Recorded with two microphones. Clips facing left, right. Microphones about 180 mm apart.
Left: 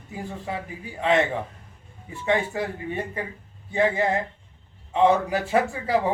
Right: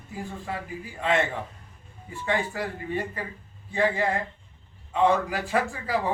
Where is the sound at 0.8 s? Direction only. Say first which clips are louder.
Left 4 dB; 20° left (ahead or behind).